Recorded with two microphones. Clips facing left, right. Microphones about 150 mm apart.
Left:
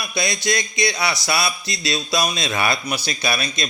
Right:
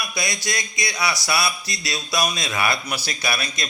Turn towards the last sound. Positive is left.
turn(degrees=20)  # may be behind; listen again after turning